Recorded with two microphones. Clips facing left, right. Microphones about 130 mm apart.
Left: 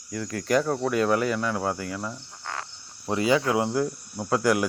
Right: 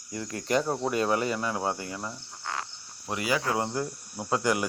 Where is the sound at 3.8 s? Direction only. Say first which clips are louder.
Left 6 dB; centre (ahead or behind).